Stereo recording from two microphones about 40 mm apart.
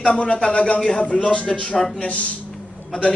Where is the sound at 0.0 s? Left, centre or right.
Centre.